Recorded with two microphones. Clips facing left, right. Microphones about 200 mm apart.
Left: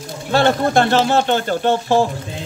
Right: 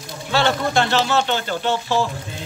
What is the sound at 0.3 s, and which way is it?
Speech, 50° left (ahead or behind).